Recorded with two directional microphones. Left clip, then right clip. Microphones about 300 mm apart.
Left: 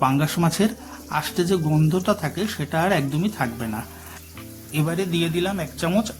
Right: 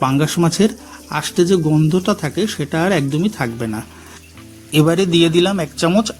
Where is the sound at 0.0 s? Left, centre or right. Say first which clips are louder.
Right 4 dB; left.